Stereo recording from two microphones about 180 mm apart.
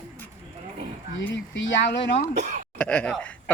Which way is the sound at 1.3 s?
90° left.